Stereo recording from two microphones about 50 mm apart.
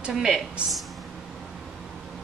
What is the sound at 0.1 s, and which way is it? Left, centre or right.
Speech, centre.